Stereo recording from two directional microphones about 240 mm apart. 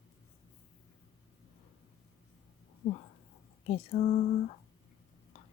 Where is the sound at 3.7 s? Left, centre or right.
Left.